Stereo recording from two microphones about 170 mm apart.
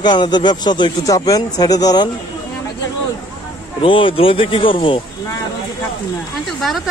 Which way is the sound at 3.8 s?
30° left (ahead or behind).